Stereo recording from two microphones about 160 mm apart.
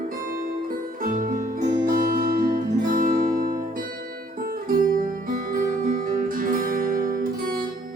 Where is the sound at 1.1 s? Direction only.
55° right (ahead or behind).